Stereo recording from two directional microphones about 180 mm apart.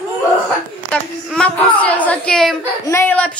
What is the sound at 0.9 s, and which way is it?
A woman's voice, 5° left (ahead or behind).